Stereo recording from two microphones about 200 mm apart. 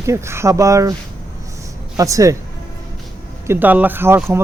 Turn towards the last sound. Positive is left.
turn(degrees=-10)  # may be behind; listen again after turning